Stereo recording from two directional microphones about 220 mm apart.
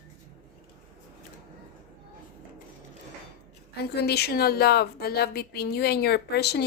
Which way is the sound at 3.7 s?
45° left (ahead or behind).